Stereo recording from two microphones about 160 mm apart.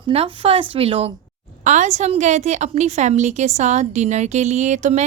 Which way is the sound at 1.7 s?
45° right (ahead or behind).